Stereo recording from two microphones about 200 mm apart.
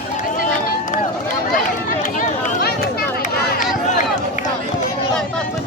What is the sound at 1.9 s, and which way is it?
Run, 40° left (ahead or behind).